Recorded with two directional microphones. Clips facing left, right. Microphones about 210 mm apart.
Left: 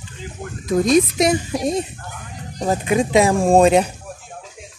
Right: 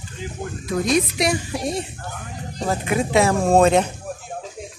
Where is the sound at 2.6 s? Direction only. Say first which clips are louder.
Left 4 dB; 15° left (ahead or behind).